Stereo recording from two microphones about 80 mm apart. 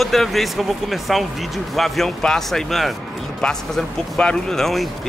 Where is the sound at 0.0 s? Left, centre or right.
Centre.